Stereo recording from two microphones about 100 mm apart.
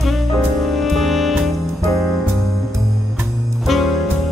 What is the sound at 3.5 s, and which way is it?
Music, centre (ahead or behind).